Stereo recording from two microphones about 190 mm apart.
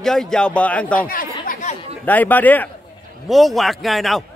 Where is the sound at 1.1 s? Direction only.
45° left (ahead or behind).